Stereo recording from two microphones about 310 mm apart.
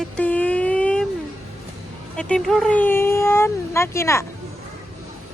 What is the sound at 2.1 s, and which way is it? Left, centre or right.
Speech, centre.